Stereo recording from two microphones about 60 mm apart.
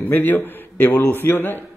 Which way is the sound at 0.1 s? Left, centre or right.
Left.